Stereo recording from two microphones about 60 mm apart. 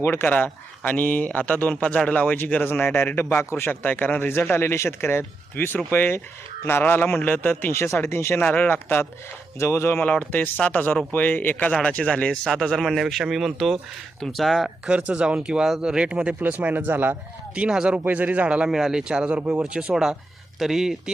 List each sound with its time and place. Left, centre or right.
0.0 s speech: left
7.7 s speech: left
8.4 s speech: left
8.7 s speech: left
9.6 s speech: left
10.0 s speech: left
11.7 s speech: centre
12.5 s a man's voice: centre
14.8 s speech: centre
16.4 s speech: right
17.5 s speech: centre
18.7 s speech: centre
19.9 s a man's voice: centre